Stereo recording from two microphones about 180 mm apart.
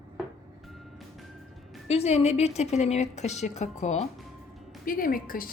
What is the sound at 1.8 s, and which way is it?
A woman's voice, 35° left (ahead or behind).